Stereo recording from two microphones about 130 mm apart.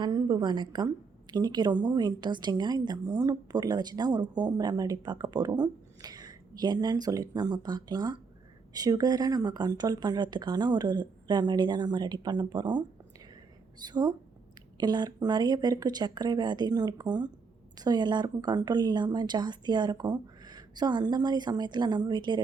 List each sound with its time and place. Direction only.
0.0 s a woman's voice: 30° right (ahead or behind)